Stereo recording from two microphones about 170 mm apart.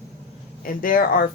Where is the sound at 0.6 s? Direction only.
55° left (ahead or behind).